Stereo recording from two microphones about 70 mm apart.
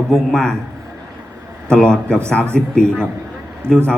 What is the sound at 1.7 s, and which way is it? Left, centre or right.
A man's voice, centre.